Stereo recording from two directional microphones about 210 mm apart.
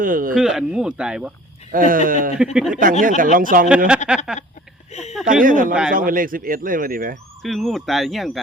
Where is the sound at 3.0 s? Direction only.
40° right (ahead or behind).